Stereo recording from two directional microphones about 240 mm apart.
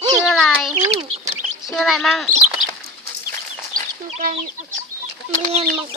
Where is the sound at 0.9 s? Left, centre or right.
Right.